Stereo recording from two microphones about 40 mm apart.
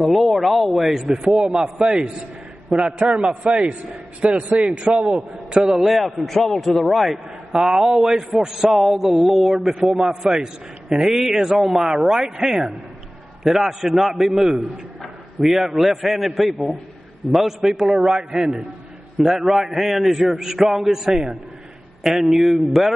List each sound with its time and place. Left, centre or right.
0.0 s a man's voice: centre
1.2 s a man's voice: right
2.7 s a man's voice: right
4.9 s a man's voice: right
5.7 s a man's voice: centre
7.6 s a man's voice: centre